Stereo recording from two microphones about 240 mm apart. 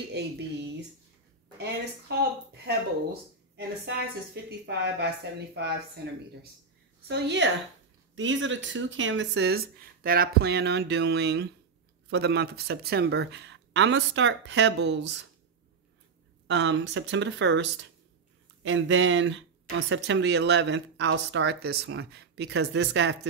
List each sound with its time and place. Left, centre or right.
0.2 s speech: right
2.6 s a woman's voice: right
16.4 s speech: right